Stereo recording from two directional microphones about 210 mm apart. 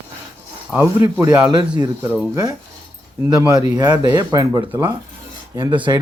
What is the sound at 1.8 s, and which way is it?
Speech, 20° right (ahead or behind).